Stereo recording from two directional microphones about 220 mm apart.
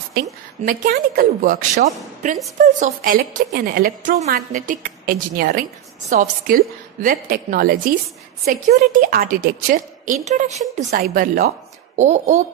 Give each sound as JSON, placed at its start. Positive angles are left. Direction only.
{"t": 0.7, "sound": "a woman's voice", "side_deg": -40}